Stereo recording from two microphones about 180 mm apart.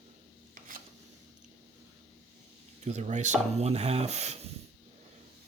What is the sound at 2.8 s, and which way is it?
Speech, 40° right (ahead or behind).